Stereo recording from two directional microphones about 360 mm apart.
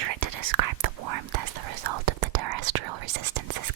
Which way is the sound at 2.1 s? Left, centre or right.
Right.